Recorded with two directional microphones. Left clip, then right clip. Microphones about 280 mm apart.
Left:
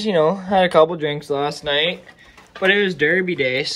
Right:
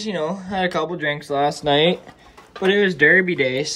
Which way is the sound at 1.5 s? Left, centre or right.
Centre.